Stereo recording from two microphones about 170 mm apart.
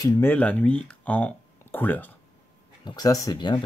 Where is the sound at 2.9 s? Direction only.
20° left (ahead or behind).